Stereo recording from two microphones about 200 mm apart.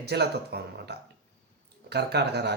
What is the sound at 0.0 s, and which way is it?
Speech, 55° right (ahead or behind).